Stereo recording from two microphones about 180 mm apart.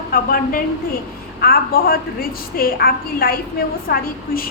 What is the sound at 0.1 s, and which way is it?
A woman's voice, 55° left (ahead or behind).